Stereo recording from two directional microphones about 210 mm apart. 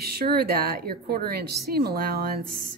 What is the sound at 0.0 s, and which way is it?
Speech, 45° right (ahead or behind).